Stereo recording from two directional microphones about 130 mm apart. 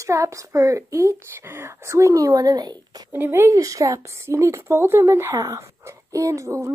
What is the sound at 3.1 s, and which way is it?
Speech, 15° right (ahead or behind).